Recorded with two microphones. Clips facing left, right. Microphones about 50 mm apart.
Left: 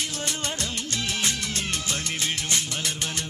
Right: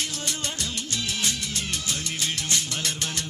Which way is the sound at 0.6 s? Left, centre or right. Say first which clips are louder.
Left 1 dB; left.